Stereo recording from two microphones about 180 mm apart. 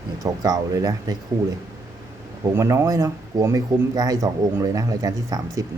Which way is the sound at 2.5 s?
15° right (ahead or behind).